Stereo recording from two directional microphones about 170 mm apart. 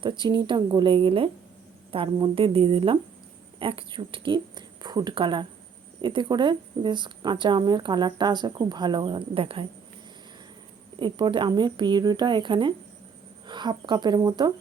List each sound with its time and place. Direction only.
0.0 s a woman's voice: 25° right (ahead or behind)
11.0 s speech: 25° right (ahead or behind)